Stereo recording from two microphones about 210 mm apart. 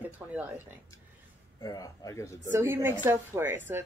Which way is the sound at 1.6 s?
15° left (ahead or behind).